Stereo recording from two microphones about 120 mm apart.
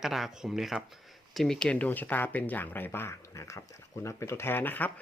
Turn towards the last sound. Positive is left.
turn(degrees=15)  # may be behind; listen again after turning